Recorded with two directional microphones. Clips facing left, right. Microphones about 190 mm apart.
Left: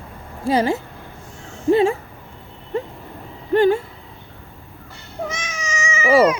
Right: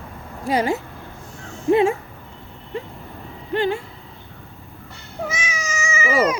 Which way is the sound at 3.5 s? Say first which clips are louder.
Left 6 dB; 45° left (ahead or behind).